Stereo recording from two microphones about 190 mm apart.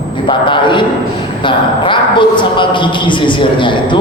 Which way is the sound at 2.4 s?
25° left (ahead or behind).